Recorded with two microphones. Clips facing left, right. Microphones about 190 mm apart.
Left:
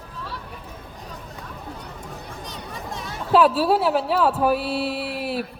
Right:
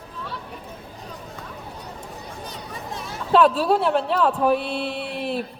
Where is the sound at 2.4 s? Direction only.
Centre (ahead or behind).